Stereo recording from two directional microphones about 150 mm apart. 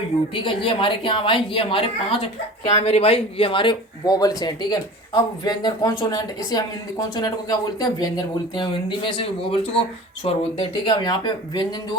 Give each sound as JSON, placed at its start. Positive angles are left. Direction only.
{"t": 0.3, "sound": "a woman's voice", "side_deg": 35}
{"t": 9.0, "sound": "a woman's voice", "side_deg": 40}